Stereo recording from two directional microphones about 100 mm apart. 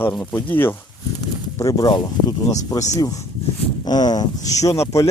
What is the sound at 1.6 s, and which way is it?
Speech, 40° left (ahead or behind).